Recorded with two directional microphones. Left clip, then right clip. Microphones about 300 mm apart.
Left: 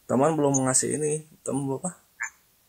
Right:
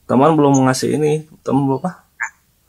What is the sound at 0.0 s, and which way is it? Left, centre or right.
Speech, centre.